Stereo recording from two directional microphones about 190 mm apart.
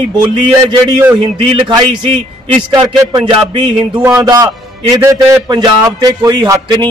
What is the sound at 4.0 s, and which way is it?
A man's voice, 15° right (ahead or behind).